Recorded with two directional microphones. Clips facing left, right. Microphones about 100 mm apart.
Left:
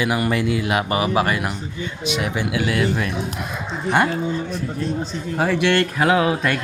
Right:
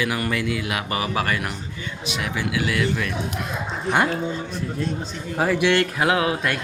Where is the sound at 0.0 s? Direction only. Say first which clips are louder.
Left 4 dB; 20° left (ahead or behind).